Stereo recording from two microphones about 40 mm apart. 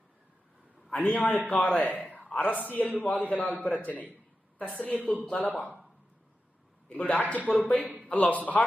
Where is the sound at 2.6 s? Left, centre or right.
Left.